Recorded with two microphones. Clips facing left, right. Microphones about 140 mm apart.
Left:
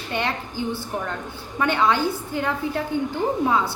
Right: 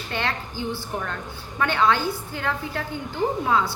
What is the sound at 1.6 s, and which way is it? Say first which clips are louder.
A woman's voice: left 1 dB; 20° left (ahead or behind).